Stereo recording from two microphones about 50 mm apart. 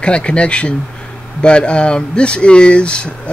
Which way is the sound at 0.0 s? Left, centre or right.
Left.